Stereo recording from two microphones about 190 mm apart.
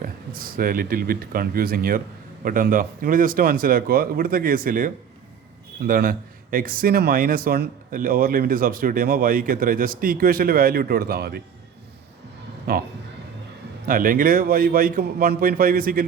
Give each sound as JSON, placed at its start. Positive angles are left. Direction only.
{"t": 0.0, "sound": "a man's voice", "side_deg": -50}
{"t": 5.9, "sound": "a man's voice", "side_deg": -50}
{"t": 12.7, "sound": "a man's voice", "side_deg": -50}
{"t": 13.8, "sound": "a man's voice", "side_deg": -50}